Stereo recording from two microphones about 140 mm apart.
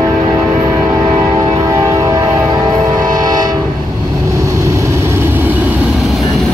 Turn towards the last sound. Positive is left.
turn(degrees=0)  # may be behind; listen again after turning